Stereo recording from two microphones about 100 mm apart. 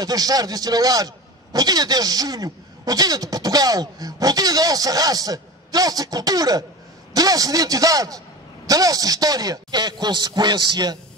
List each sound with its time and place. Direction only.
0.0 s a man's voice: 40° right (ahead or behind)